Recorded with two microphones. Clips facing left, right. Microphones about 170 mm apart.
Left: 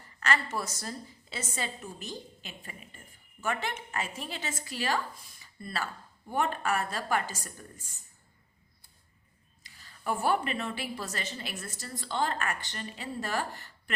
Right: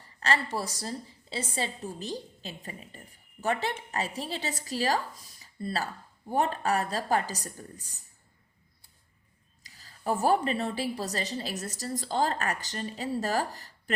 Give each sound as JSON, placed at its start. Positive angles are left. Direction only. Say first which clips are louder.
{"t": 0.0, "sound": "a woman's voice", "louder": "right 2 dB", "side_deg": -30}
{"t": 9.6, "sound": "a woman's voice", "louder": "right 3 dB", "side_deg": -35}